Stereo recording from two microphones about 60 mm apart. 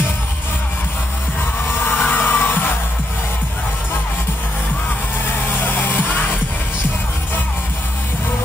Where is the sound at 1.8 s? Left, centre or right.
Left.